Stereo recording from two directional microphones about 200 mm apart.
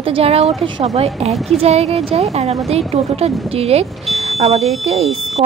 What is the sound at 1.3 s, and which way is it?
Speech, centre (ahead or behind).